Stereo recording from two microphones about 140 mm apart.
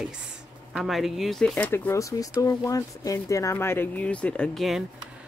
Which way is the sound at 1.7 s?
20° left (ahead or behind).